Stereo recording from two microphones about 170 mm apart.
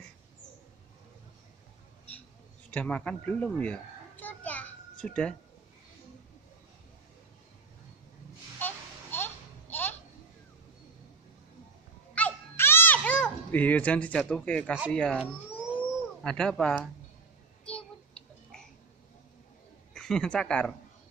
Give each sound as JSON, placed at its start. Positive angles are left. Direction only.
{"t": 2.7, "sound": "children playing", "side_deg": 5}
{"t": 8.5, "sound": "a sound", "side_deg": 10}
{"t": 12.2, "sound": "music", "side_deg": 10}
{"t": 14.9, "sound": "speech", "side_deg": 5}
{"t": 16.3, "sound": "speech", "side_deg": 5}
{"t": 17.6, "sound": "a sound", "side_deg": 5}
{"t": 19.9, "sound": "speech", "side_deg": 5}